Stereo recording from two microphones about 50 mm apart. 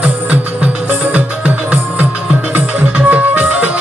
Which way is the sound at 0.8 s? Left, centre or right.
Right.